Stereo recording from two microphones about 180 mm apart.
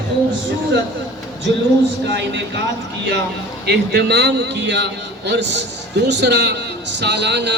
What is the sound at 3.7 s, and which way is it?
A man's voice, 65° right (ahead or behind).